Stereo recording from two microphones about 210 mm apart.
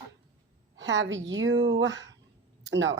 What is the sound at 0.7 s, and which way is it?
Speech, 60° right (ahead or behind).